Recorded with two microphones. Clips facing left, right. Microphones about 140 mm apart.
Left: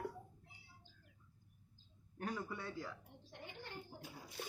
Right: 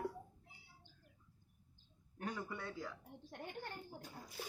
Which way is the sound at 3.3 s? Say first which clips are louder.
Right 5 dB; 50° right (ahead or behind).